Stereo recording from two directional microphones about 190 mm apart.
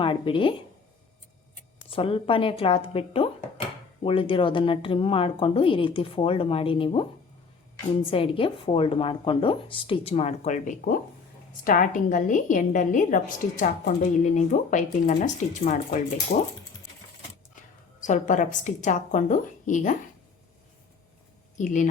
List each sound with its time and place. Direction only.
0.0 s speech: 25° left (ahead or behind)
1.9 s speech: 30° left (ahead or behind)
8.1 s a woman's voice: 30° left (ahead or behind); by 16.4 s 45° left (ahead or behind)
18.0 s a woman's voice: 40° left (ahead or behind)
21.6 s a woman's voice: 40° left (ahead or behind)